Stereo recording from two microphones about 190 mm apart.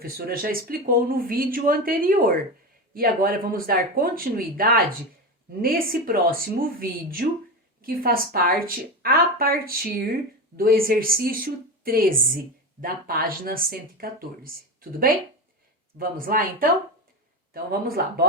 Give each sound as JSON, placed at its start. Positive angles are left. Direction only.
{"t": 0.0, "sound": "a woman's voice", "side_deg": -50}